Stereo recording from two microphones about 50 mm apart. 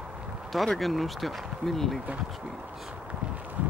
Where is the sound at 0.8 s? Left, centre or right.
Centre.